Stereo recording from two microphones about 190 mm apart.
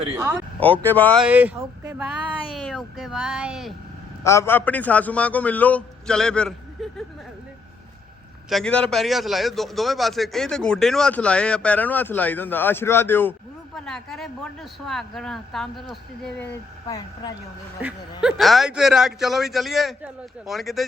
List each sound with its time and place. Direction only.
0.2 s speech: 15° right (ahead or behind)
0.6 s a man's voice: 10° left (ahead or behind)
1.2 s speech: 10° right (ahead or behind)
4.2 s a man's voice: 15° left (ahead or behind)
8.4 s a man's voice: centre (ahead or behind)
16.8 s speech: 20° left (ahead or behind)
18.2 s a man's voice: centre (ahead or behind)